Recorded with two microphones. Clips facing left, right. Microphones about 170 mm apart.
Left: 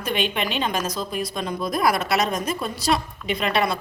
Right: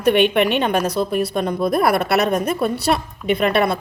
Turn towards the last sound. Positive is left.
turn(degrees=-55)  # may be behind; listen again after turning